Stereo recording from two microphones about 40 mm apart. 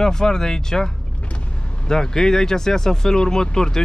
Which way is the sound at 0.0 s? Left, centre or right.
Centre.